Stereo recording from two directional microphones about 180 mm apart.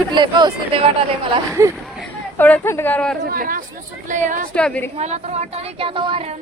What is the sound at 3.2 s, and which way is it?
Speech, 55° right (ahead or behind).